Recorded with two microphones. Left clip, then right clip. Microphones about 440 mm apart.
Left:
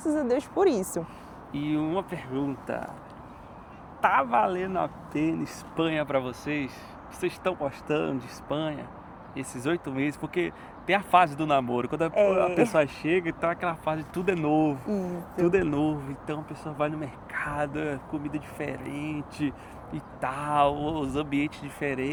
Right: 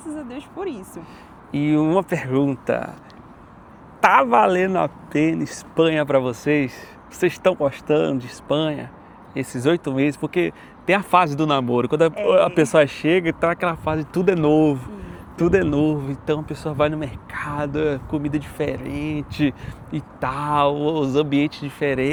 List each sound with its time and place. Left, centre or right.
0.2 s speech: left
1.5 s speech: right
4.0 s speech: right
5.2 s speech: centre
16.2 s speech: right
17.0 s speech: centre
19.3 s speech: right
20.0 s speech: right